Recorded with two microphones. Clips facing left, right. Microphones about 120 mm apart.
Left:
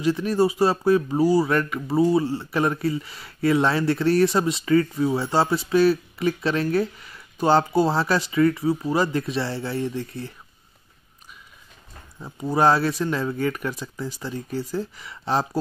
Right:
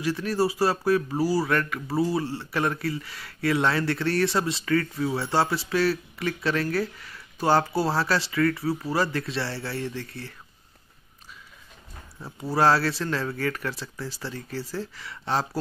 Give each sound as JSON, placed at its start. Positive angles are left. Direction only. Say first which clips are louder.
{"t": 0.0, "sound": "a man's voice", "louder": "left 4 dB", "side_deg": 20}
{"t": 12.4, "sound": "a man's voice", "louder": "left 2 dB", "side_deg": 20}